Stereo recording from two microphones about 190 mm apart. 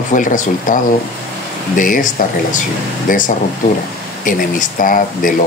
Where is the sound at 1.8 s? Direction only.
45° left (ahead or behind).